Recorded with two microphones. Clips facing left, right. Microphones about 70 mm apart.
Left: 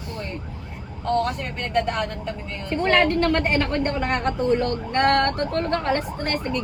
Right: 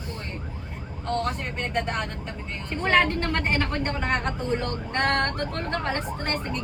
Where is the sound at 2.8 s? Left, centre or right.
Right.